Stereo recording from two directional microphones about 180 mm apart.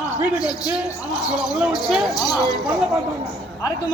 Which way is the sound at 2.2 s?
20° left (ahead or behind).